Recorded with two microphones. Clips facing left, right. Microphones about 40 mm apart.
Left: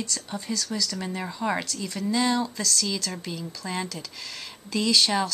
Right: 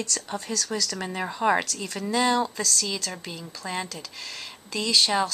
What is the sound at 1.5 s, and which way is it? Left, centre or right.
Speech, right.